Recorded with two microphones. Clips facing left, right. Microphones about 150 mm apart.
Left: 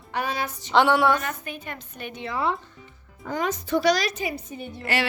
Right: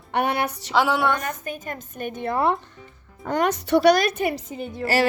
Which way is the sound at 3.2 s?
70° right (ahead or behind).